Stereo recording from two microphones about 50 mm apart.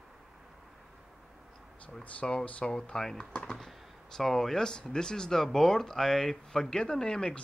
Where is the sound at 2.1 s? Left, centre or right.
Left.